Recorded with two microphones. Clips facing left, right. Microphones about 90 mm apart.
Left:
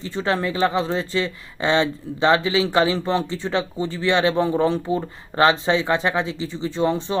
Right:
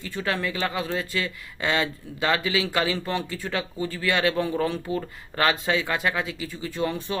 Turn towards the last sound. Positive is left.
turn(degrees=30)  # may be behind; listen again after turning